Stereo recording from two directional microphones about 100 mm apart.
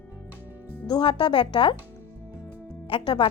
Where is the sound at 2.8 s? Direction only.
60° left (ahead or behind).